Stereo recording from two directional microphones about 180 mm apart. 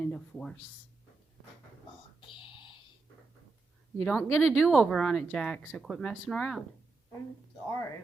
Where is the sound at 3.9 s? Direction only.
10° left (ahead or behind).